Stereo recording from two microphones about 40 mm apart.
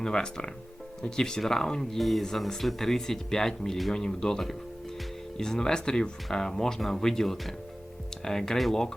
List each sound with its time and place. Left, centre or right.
0.0 s speech: centre
8.5 s speech: centre